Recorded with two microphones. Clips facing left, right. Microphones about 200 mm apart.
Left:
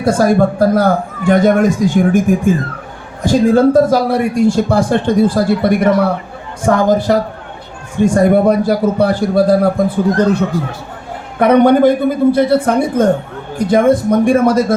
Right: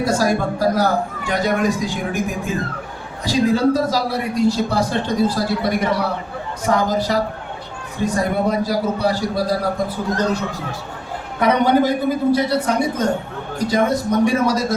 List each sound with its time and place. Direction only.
0.0 s speech: 55° left (ahead or behind)